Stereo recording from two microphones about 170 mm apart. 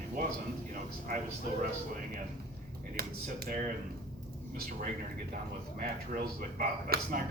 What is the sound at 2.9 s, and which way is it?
Speech, 65° right (ahead or behind).